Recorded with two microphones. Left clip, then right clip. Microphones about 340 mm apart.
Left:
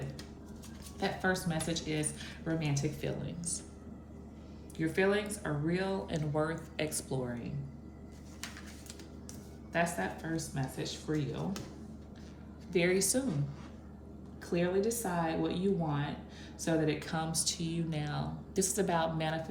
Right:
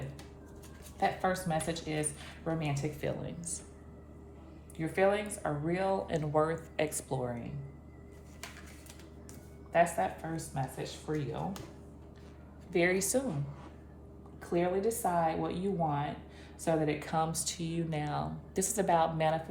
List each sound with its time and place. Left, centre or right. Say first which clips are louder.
0.9 s speech: right 2 dB; centre
4.8 s speech: right 1 dB; centre
9.7 s speech: right 5 dB; centre
12.7 s speech: right 1 dB; right
14.5 s speech: right 1 dB; centre